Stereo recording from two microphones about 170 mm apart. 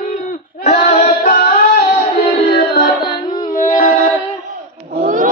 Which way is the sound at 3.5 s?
50° left (ahead or behind).